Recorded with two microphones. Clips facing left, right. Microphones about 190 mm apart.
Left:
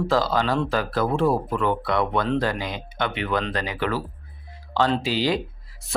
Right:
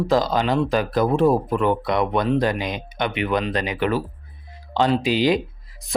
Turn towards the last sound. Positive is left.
turn(degrees=-15)  # may be behind; listen again after turning